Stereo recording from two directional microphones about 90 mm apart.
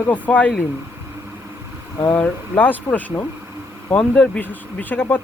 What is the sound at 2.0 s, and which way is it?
Speech, 15° left (ahead or behind).